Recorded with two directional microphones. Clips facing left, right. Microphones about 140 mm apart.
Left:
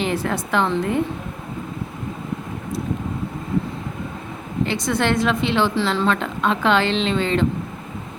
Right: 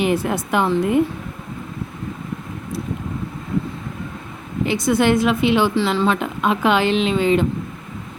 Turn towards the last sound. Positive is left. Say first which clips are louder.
# right 3 dB
turn(degrees=-10)  # may be behind; listen again after turning